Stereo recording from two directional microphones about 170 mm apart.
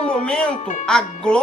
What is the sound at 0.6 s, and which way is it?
Speech, 45° left (ahead or behind).